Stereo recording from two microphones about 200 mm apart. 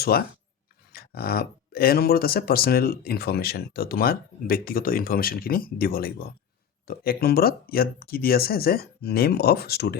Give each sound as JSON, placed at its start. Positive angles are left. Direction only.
{"t": 0.1, "sound": "speech", "side_deg": 50}